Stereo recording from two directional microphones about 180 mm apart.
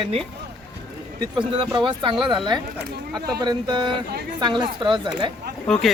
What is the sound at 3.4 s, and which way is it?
A man's voice, 25° right (ahead or behind).